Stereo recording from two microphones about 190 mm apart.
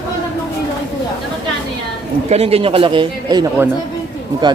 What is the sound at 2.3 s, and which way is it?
A man's voice, 30° right (ahead or behind).